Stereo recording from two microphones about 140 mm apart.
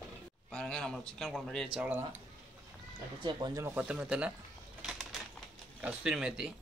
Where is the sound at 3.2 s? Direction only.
35° right (ahead or behind).